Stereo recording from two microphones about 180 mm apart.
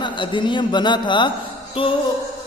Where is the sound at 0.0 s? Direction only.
25° left (ahead or behind).